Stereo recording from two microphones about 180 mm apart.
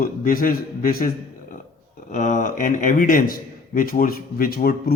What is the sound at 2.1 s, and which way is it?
Speech, 45° left (ahead or behind).